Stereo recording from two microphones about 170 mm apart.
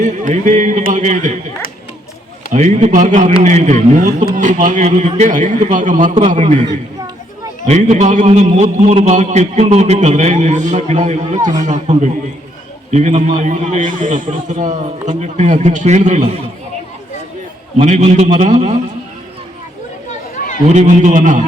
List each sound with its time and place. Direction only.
0.0 s a man's voice: 45° right (ahead or behind)
2.5 s a man's voice: 45° right (ahead or behind)
7.7 s a man's voice: 45° right (ahead or behind)
17.7 s a man's voice: 40° right (ahead or behind)
20.1 s chatter: 50° left (ahead or behind)
20.7 s a man's voice: 45° right (ahead or behind)